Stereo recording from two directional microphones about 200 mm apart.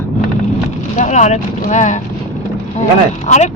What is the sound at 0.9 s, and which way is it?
A woman's voice, 35° left (ahead or behind).